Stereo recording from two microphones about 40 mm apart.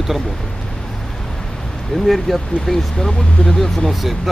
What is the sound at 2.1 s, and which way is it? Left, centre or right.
Speech, centre.